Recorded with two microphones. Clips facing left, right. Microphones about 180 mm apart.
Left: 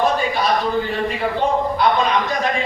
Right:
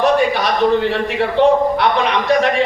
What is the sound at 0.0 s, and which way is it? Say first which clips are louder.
A man's voice: right 4 dB; 75° right (ahead or behind).